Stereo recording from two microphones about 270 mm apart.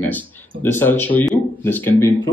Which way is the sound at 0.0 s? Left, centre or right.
Centre.